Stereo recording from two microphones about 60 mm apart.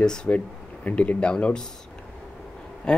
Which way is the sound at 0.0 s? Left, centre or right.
Centre.